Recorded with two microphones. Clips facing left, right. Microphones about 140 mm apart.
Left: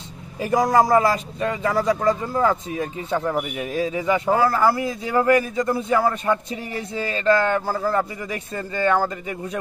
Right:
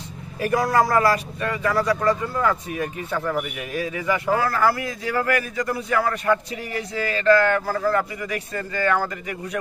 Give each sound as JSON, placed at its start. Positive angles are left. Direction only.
{"t": 0.5, "sound": "a man's voice", "side_deg": 20}